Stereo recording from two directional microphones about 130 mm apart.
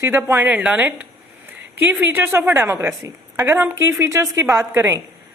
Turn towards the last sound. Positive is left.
turn(degrees=-20)  # may be behind; listen again after turning